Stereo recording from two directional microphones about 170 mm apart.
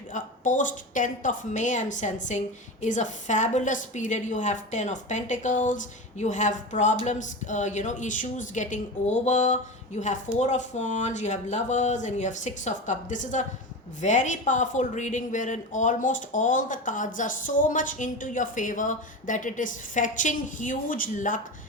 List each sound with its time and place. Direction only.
0.1 s speech: 50° left (ahead or behind)